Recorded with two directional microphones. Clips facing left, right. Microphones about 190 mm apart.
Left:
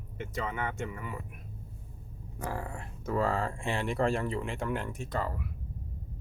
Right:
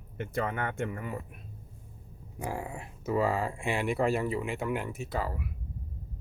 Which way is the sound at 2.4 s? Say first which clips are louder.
Right 1 dB; 10° right (ahead or behind).